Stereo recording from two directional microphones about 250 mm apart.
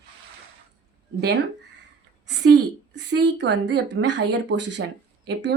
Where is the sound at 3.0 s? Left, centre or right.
Right.